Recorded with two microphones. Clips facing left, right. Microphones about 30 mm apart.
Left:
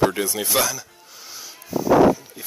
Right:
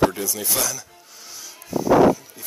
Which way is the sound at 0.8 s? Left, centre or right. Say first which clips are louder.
Left 1 dB; centre.